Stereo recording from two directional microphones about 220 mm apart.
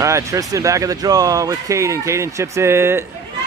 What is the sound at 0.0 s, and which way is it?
Speech, 15° right (ahead or behind).